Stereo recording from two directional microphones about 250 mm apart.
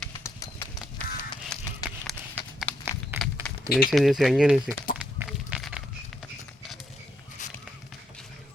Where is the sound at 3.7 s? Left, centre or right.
Left.